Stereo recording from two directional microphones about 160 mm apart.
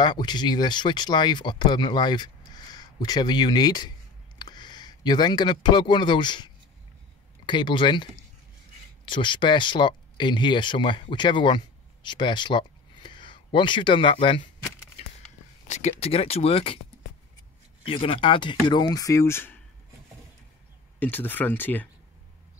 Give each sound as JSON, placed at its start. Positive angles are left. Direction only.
{"t": 0.0, "sound": "speech", "side_deg": 30}
{"t": 15.7, "sound": "speech", "side_deg": 40}
{"t": 17.8, "sound": "speech", "side_deg": 35}
{"t": 21.0, "sound": "speech", "side_deg": 10}